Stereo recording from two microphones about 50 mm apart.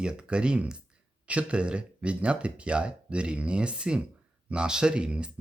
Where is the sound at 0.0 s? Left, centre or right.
Centre.